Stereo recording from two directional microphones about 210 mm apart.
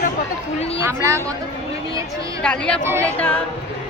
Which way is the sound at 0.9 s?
15° right (ahead or behind).